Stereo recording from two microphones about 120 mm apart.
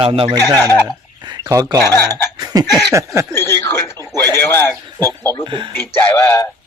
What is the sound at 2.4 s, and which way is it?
Cough, 30° right (ahead or behind).